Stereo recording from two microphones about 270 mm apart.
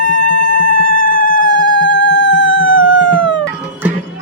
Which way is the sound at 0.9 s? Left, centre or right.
Left.